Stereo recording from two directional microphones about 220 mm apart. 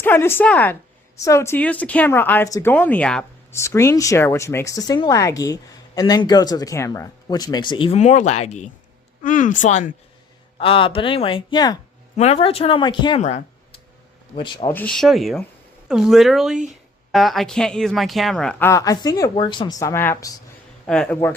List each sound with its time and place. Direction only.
0.0 s speech: 10° left (ahead or behind)
12.1 s speech: 30° left (ahead or behind)
14.3 s speech: 20° left (ahead or behind)
14.7 s speech: 5° left (ahead or behind)